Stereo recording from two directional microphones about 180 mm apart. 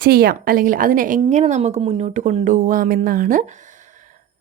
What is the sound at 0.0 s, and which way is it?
A woman's voice, 55° right (ahead or behind).